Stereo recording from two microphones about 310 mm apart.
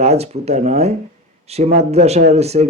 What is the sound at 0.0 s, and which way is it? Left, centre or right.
Speech, right.